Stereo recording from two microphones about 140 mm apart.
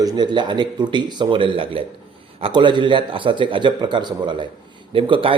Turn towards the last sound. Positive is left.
turn(degrees=-40)  # may be behind; listen again after turning